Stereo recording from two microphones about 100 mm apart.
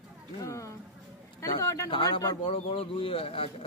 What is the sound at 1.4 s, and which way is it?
Speech, 30° left (ahead or behind).